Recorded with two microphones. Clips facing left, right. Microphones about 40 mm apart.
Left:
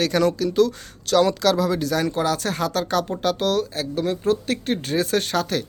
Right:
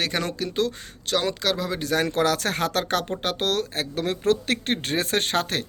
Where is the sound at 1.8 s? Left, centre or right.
Right.